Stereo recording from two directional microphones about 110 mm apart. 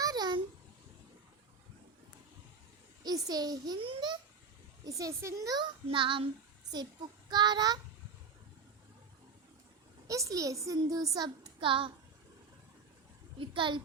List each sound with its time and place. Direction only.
0.0 s babbling: 40° right (ahead or behind)
3.0 s a child's voice: 35° right (ahead or behind)
3.8 s a child's voice: 50° right (ahead or behind)
4.9 s a woman's voice: 30° right (ahead or behind)
5.9 s a child's voice: 50° right (ahead or behind)
7.3 s a woman's voice: 40° right (ahead or behind)
10.1 s a woman's voice: 30° right (ahead or behind)
11.6 s a child's voice: 50° right (ahead or behind)
13.4 s a child's voice: 50° right (ahead or behind)